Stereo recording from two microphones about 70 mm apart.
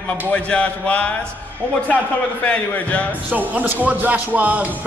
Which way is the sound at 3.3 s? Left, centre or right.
Right.